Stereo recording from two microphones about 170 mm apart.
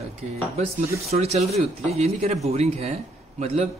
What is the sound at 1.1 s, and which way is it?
A man's voice, 40° right (ahead or behind).